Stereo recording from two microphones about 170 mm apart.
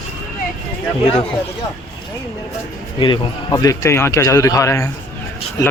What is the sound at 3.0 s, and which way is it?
A man's voice, 25° left (ahead or behind).